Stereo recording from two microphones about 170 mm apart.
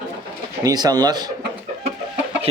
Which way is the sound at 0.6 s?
25° right (ahead or behind).